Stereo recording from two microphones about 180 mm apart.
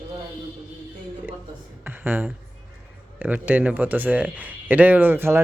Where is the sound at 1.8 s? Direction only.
10° right (ahead or behind).